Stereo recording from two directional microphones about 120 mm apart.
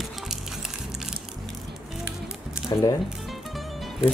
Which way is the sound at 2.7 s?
35° left (ahead or behind).